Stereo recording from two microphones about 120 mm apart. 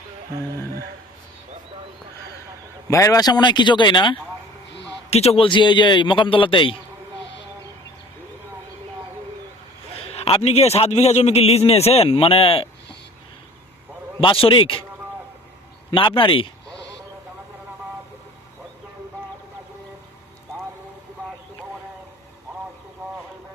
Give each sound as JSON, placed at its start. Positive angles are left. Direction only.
{"t": 2.9, "sound": "a man's voice", "side_deg": 25}
{"t": 5.1, "sound": "a man's voice", "side_deg": 60}
{"t": 9.9, "sound": "a man's voice", "side_deg": 55}
{"t": 14.2, "sound": "a man's voice", "side_deg": 50}
{"t": 15.9, "sound": "a man's voice", "side_deg": 45}